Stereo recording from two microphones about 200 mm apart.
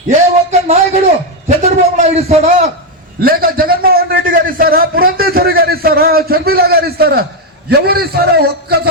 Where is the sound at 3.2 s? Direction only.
45° right (ahead or behind).